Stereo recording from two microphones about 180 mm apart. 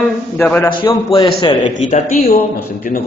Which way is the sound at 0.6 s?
25° left (ahead or behind).